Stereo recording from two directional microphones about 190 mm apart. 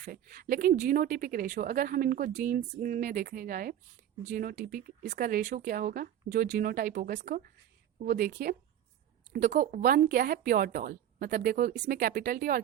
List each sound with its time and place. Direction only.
0.0 s speech: 50° right (ahead or behind)